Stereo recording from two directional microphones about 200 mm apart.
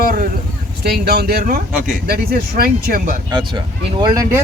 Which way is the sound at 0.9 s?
50° right (ahead or behind).